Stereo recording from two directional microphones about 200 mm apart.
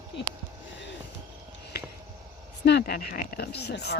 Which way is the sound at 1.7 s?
50° left (ahead or behind).